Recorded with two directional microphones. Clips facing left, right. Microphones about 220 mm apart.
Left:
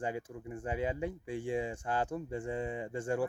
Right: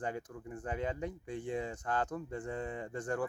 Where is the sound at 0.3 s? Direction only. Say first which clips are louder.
Left 2 dB; 10° left (ahead or behind).